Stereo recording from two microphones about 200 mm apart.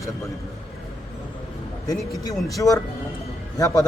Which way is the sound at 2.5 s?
15° left (ahead or behind).